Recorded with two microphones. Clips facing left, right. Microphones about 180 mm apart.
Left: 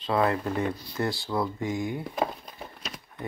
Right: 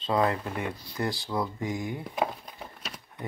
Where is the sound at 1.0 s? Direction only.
15° right (ahead or behind).